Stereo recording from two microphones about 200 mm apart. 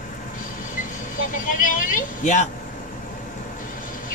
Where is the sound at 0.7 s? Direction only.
40° left (ahead or behind).